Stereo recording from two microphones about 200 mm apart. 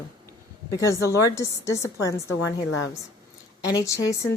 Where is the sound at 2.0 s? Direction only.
65° left (ahead or behind).